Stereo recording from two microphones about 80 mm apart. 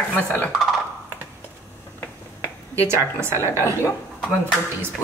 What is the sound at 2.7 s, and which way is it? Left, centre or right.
Speech, right.